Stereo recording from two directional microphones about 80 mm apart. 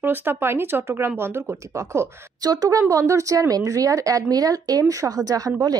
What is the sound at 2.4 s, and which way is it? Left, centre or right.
A woman's voice, right.